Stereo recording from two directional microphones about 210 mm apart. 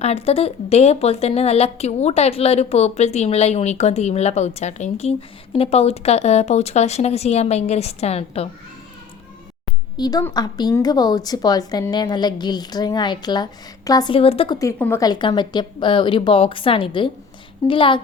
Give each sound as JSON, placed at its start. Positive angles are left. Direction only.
{"t": 0.0, "sound": "a woman's voice", "side_deg": 30}
{"t": 10.0, "sound": "a woman's voice", "side_deg": 15}